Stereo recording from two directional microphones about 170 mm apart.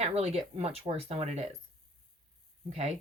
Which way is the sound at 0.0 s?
40° right (ahead or behind).